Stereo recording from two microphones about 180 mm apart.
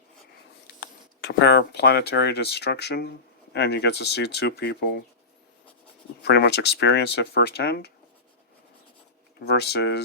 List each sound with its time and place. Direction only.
0.8 s speech: 70° left (ahead or behind)
6.2 s speech: 65° left (ahead or behind)
9.4 s speech: 65° left (ahead or behind)